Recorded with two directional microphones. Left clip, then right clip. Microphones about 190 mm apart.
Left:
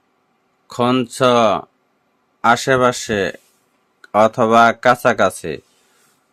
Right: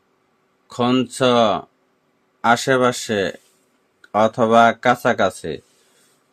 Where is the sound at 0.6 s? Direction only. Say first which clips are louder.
Left 2 dB; 20° left (ahead or behind).